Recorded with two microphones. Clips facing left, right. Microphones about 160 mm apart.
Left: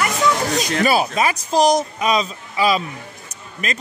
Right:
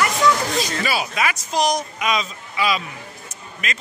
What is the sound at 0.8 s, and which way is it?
Speech, 45° left (ahead or behind).